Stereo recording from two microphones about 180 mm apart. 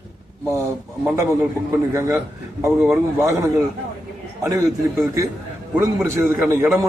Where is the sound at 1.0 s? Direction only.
15° right (ahead or behind).